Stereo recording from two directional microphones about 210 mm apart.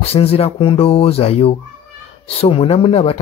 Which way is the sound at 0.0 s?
30° left (ahead or behind).